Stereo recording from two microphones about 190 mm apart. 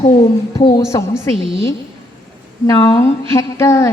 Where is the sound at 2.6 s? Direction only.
20° left (ahead or behind).